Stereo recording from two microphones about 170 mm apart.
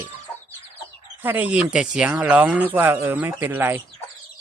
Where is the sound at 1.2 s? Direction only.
10° right (ahead or behind).